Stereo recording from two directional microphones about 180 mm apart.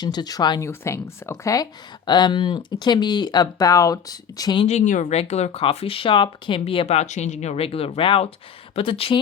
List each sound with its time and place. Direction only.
0.0 s speech: 25° left (ahead or behind)
4.6 s speech: 40° left (ahead or behind)